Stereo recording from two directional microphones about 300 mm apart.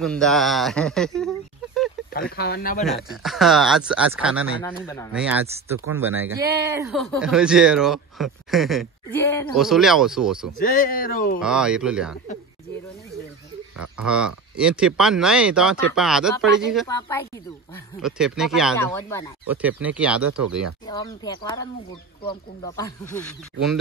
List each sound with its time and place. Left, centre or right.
0.0 s speech: centre
2.1 s speech: left
2.8 s speech: centre
4.6 s speech: centre
5.1 s speech: centre
9.6 s speech: centre
10.6 s speech: left
11.4 s speech: centre
13.7 s speech: centre
16.8 s speech: centre
18.0 s speech: centre
20.8 s speech: centre